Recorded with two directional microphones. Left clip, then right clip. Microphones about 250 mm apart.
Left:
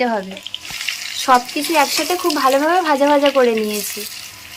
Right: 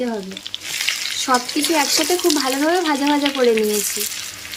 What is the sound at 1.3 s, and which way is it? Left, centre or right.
Speech, centre.